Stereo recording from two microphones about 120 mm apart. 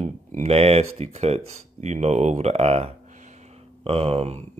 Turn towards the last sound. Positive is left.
turn(degrees=-55)  # may be behind; listen again after turning